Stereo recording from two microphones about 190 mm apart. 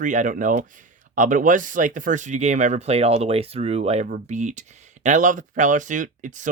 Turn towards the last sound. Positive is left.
turn(degrees=-40)  # may be behind; listen again after turning